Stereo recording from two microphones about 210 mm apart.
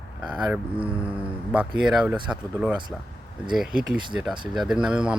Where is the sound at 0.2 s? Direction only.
5° right (ahead or behind).